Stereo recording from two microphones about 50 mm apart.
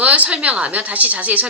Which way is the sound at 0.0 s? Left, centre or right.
Right.